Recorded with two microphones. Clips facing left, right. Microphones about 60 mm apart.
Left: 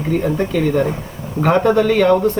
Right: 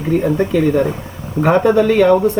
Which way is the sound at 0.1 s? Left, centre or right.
Centre.